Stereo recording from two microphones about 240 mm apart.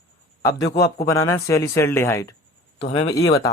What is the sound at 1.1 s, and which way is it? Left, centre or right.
Speech, centre.